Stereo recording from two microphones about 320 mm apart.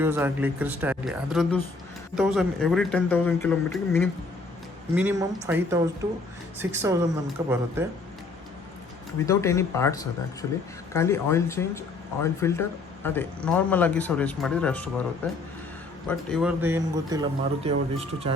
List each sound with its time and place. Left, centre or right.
0.0 s speech: centre
4.9 s a man's voice: centre
9.2 s a man's voice: centre